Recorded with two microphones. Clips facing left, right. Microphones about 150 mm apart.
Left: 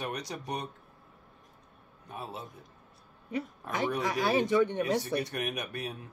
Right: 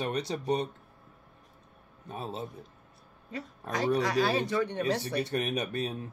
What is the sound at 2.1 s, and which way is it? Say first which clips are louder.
Speech: right 4 dB; 25° right (ahead or behind).